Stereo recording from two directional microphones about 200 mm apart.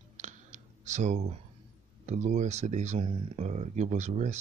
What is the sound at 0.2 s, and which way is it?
Clicking, 35° right (ahead or behind).